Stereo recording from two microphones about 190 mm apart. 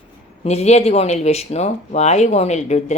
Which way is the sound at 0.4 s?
35° left (ahead or behind).